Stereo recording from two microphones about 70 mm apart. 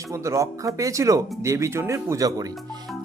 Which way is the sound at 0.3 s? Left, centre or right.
Right.